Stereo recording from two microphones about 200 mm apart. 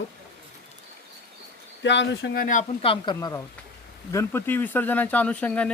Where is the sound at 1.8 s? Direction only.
65° left (ahead or behind); by 2.6 s 45° left (ahead or behind).